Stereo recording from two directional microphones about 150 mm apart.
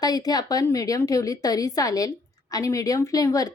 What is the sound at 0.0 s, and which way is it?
A woman's voice, 25° left (ahead or behind).